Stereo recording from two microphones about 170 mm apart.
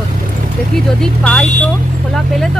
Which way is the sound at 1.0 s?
5° left (ahead or behind).